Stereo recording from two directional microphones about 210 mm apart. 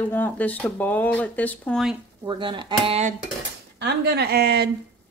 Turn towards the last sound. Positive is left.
turn(degrees=-50)  # may be behind; listen again after turning